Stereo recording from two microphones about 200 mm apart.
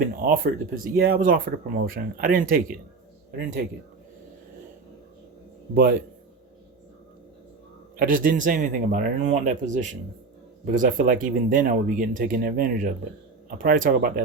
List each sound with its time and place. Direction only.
0.2 s speech: 45° right (ahead or behind)
5.7 s speech: 45° right (ahead or behind)
7.9 s speech: 45° right (ahead or behind)